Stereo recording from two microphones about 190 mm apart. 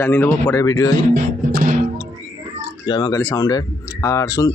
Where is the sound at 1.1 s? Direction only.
45° right (ahead or behind).